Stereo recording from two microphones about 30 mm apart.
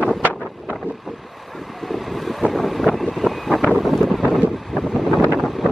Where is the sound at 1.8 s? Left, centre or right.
Centre.